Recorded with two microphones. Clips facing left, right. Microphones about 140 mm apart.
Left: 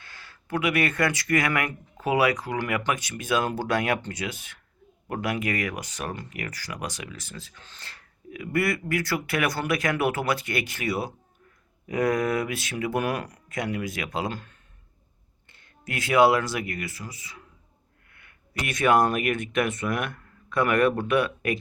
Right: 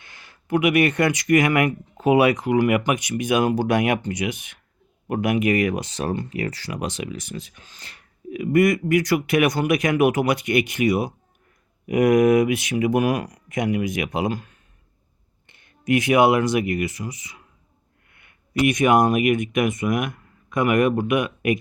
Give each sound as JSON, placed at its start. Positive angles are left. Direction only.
{"t": 0.0, "sound": "speech", "side_deg": -20}